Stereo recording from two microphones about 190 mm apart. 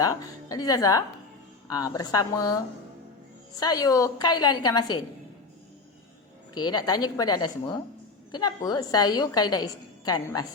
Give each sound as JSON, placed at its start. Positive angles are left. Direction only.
{"t": 0.0, "sound": "a woman's voice", "side_deg": 20}
{"t": 3.6, "sound": "a woman's voice", "side_deg": 20}
{"t": 6.5, "sound": "a woman's voice", "side_deg": 20}